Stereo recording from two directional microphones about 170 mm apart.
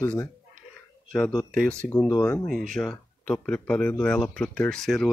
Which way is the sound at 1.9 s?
15° left (ahead or behind).